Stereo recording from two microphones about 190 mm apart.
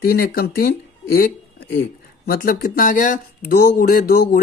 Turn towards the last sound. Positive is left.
turn(degrees=50)  # may be behind; listen again after turning